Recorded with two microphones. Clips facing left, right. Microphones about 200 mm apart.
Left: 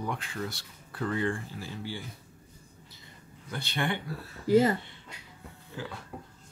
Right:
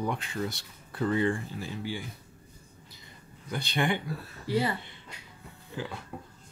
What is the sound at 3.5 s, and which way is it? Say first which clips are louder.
Speech: right 3 dB; 15° right (ahead or behind).